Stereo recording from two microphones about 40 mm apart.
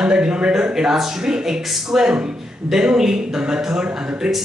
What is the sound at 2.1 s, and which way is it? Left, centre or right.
Speech, right.